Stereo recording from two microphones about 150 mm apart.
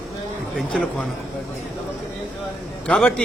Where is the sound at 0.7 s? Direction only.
5° left (ahead or behind).